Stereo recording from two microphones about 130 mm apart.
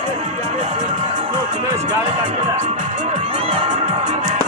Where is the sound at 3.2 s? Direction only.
45° right (ahead or behind).